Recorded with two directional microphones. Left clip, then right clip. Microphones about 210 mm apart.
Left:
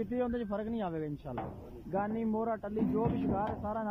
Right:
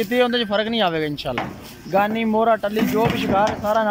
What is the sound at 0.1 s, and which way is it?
Speech, 50° right (ahead or behind).